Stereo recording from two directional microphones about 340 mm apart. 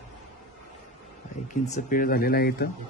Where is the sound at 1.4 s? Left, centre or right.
Left.